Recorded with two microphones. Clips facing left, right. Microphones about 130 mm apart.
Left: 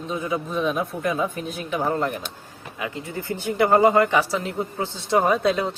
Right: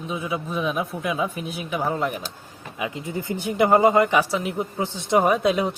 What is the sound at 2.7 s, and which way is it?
Speech, 20° right (ahead or behind).